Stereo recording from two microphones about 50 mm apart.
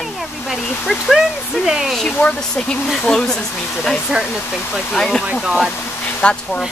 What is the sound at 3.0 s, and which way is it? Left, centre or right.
Speech, centre.